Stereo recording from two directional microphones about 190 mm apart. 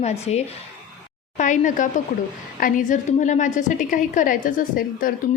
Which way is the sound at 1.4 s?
40° left (ahead or behind).